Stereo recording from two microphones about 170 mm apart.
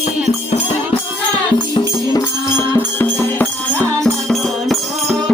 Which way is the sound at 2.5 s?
10° left (ahead or behind).